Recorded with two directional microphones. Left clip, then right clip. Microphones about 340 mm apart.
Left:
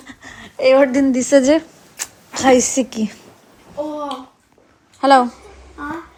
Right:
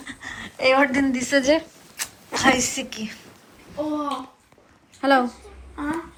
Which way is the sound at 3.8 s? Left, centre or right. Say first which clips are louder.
Left 3 dB; centre.